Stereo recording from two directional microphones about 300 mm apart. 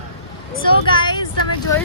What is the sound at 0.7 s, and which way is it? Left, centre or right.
Speech, centre.